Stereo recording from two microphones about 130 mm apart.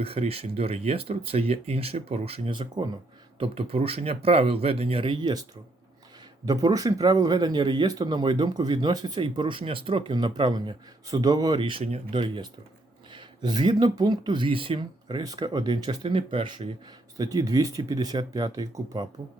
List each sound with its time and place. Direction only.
0.0 s speech: 50° right (ahead or behind)
17.2 s speech: 25° right (ahead or behind)